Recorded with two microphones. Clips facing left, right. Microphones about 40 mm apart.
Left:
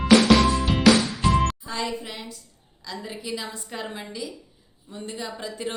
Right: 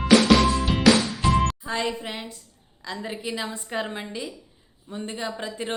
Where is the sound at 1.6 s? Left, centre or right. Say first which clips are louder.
Right 2 dB; right.